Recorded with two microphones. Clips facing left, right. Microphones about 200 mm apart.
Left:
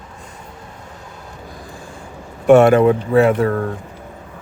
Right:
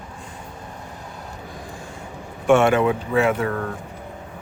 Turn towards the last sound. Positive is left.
turn(degrees=35)  # may be behind; listen again after turning